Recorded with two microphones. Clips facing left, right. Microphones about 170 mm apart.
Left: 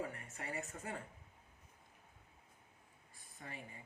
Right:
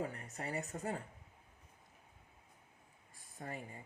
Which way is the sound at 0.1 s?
35° right (ahead or behind).